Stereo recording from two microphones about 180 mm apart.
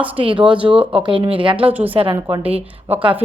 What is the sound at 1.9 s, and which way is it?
Speech, 30° right (ahead or behind).